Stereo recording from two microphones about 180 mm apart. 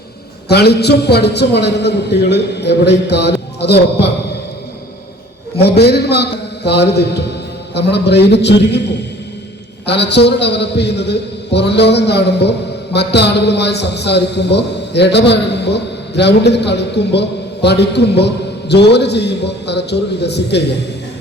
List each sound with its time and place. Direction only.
0.4 s a man's voice: 65° left (ahead or behind)
5.5 s a man's voice: 65° left (ahead or behind)
9.8 s a man's voice: 70° left (ahead or behind)